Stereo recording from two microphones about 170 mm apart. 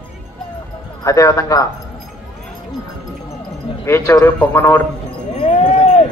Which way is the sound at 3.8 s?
15° left (ahead or behind).